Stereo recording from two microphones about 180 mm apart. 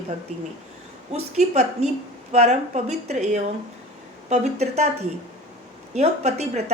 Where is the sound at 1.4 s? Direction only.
40° right (ahead or behind).